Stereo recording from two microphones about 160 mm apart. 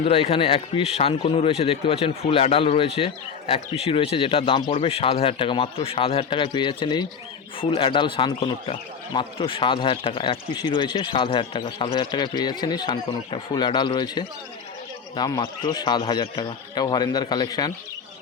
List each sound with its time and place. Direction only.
0.0 s a man's voice: 40° left (ahead or behind); by 17.7 s 25° left (ahead or behind)